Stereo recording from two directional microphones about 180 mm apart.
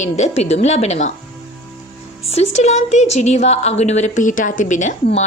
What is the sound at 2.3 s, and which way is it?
A woman's voice, 40° left (ahead or behind).